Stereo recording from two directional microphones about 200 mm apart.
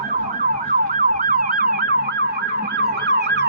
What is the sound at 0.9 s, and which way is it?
Emergency vehicle, 40° right (ahead or behind).